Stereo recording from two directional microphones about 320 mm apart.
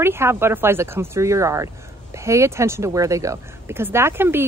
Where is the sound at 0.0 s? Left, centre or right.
Centre.